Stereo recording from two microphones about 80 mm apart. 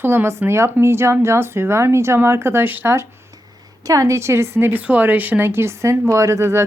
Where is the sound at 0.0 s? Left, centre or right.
Right.